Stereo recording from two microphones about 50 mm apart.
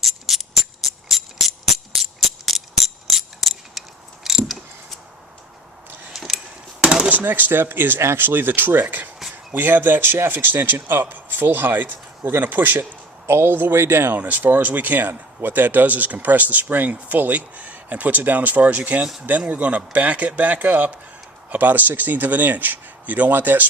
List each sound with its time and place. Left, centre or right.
0.0 s music: centre
2.5 s mechanisms: centre
6.1 s a sound: centre
6.8 s a sound: centre
7.1 s speech: right
13.2 s speech: right
14.2 s speech: right